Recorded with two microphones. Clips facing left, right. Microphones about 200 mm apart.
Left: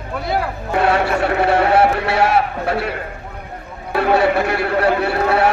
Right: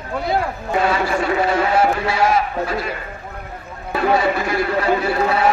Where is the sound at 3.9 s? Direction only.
65° left (ahead or behind).